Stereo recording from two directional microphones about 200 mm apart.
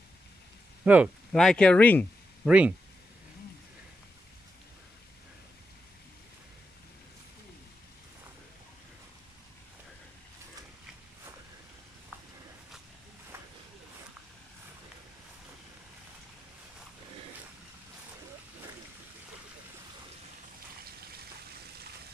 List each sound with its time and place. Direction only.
0.8 s speech: 10° right (ahead or behind)
1.3 s speech: 5° left (ahead or behind)
2.4 s speech: 5° right (ahead or behind)